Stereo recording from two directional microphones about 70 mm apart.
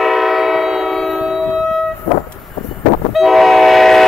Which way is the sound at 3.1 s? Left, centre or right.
Centre.